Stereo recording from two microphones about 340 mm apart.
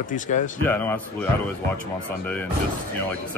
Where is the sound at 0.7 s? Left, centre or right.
Centre.